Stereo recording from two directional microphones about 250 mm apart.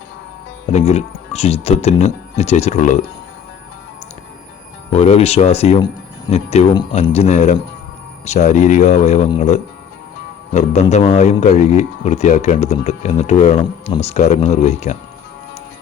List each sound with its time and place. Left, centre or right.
0.7 s a man's voice: left
4.9 s a man's voice: left